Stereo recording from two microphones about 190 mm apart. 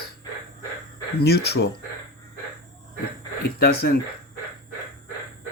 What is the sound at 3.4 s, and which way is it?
Speech, 55° left (ahead or behind).